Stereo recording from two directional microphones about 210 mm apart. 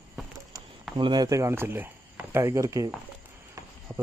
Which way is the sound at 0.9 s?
20° right (ahead or behind).